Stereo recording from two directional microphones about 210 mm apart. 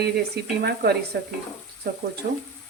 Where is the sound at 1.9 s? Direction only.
50° right (ahead or behind).